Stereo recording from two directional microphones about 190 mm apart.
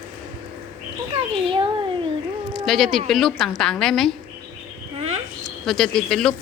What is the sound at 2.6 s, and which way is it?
A woman's voice, centre (ahead or behind).